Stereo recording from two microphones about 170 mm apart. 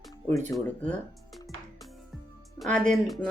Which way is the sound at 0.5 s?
5° left (ahead or behind).